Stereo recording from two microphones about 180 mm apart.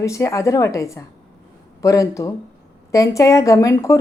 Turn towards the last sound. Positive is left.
turn(degrees=15)  # may be behind; listen again after turning